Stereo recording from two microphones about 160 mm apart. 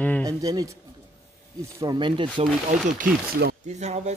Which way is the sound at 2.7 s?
55° right (ahead or behind).